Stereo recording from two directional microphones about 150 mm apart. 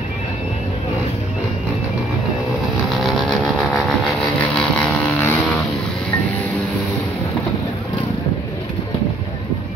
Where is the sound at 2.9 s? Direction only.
Centre (ahead or behind).